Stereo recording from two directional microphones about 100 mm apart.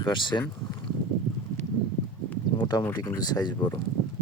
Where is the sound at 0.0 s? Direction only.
50° left (ahead or behind).